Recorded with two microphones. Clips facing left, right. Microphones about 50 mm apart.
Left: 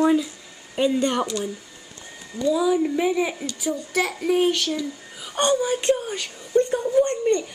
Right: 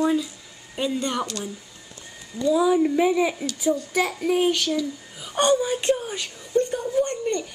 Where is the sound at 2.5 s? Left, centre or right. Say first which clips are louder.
Right 1 dB; centre.